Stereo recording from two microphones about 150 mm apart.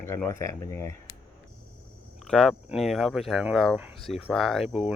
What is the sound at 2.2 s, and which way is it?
Speech, 5° left (ahead or behind).